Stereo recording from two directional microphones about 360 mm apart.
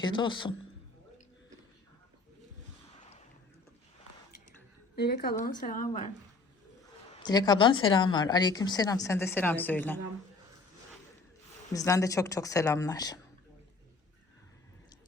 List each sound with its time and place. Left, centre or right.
0.0 s speech: centre
4.9 s a woman's voice: left
7.2 s speech: centre
11.7 s speech: centre